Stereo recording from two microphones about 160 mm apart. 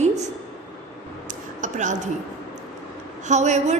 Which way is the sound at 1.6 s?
50° right (ahead or behind).